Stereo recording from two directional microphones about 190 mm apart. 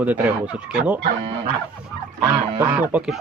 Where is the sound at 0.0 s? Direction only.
10° right (ahead or behind).